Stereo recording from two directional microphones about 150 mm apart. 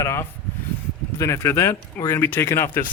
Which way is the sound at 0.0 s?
20° left (ahead or behind).